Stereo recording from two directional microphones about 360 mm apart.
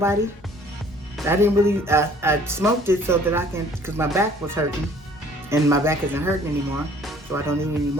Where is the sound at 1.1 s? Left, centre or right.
Centre.